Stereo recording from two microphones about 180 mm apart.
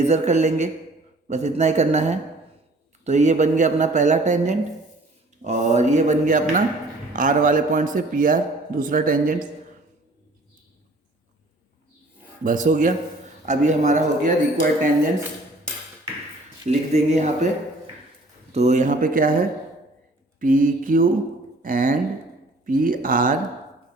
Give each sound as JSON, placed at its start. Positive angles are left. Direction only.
{"t": 0.0, "sound": "a man's voice", "side_deg": -40}
{"t": 12.4, "sound": "a man's voice", "side_deg": -45}
{"t": 16.6, "sound": "speech", "side_deg": -40}
{"t": 18.5, "sound": "a man's voice", "side_deg": -40}